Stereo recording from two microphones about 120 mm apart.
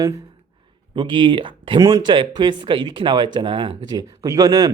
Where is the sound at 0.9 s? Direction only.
40° right (ahead or behind).